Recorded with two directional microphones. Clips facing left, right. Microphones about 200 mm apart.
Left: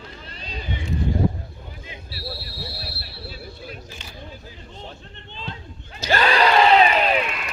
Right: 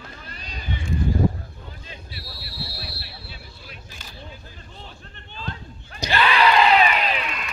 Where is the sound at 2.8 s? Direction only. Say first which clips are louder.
Left 2 dB; 45° left (ahead or behind).